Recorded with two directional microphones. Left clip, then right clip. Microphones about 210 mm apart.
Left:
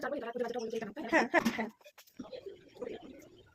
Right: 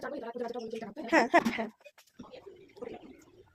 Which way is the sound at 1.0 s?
50° right (ahead or behind).